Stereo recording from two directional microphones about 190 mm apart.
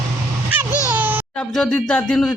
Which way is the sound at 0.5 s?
10° right (ahead or behind).